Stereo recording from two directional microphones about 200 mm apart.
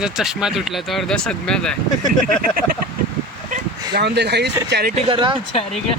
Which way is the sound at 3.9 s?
55° right (ahead or behind).